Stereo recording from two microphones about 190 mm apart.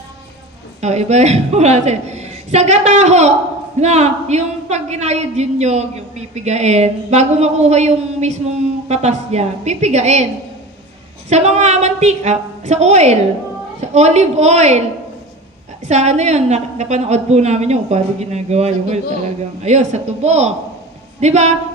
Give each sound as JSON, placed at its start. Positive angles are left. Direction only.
{"t": 0.7, "sound": "a woman's voice", "side_deg": -35}
{"t": 15.9, "sound": "a woman's voice", "side_deg": -35}